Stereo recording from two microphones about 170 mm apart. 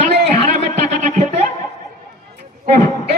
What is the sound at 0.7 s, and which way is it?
Speech, 45° right (ahead or behind).